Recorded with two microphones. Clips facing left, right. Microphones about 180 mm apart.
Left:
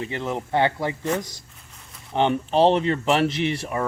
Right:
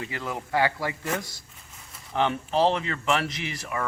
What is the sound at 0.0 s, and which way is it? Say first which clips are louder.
Speech: left 5 dB; 25° left (ahead or behind).